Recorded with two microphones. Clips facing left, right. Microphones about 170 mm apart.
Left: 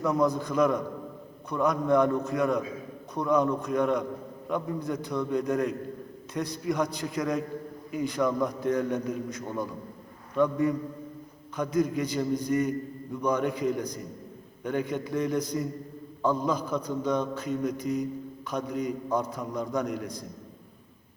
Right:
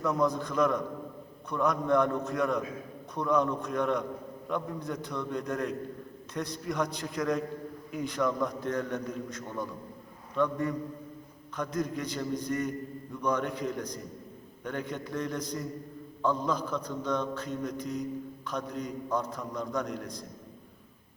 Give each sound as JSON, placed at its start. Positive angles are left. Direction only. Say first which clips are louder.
{"t": 0.0, "sound": "a man's voice", "louder": "left 3 dB", "side_deg": 5}